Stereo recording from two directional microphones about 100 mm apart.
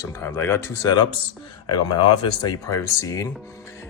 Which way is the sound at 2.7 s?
35° left (ahead or behind).